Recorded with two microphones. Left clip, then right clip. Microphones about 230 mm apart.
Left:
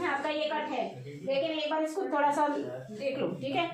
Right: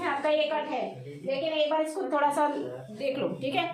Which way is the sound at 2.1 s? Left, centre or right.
Right.